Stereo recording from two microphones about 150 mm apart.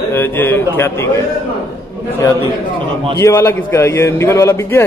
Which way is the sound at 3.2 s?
20° left (ahead or behind).